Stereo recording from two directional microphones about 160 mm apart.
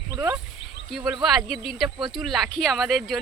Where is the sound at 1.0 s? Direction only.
Centre (ahead or behind).